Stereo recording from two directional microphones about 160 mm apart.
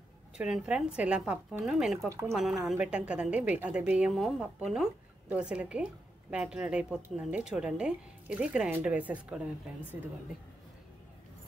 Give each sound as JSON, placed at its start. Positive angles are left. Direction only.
{"t": 0.4, "sound": "a woman's voice", "side_deg": -5}
{"t": 2.0, "sound": "a woman's voice", "side_deg": -20}
{"t": 2.6, "sound": "a woman's voice", "side_deg": -5}